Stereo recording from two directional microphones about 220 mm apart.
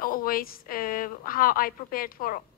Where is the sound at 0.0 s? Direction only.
40° left (ahead or behind).